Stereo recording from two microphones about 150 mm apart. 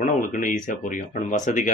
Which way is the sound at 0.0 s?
60° left (ahead or behind).